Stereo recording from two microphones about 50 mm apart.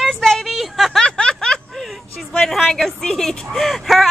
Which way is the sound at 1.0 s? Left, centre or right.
Centre.